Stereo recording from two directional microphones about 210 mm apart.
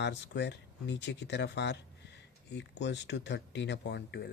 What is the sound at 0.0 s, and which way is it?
Speech, 55° left (ahead or behind).